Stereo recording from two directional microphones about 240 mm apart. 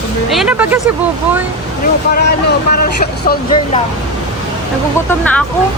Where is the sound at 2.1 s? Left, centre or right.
Left.